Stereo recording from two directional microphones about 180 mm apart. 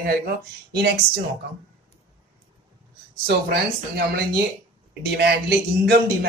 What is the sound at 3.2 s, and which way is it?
Speech, 60° right (ahead or behind).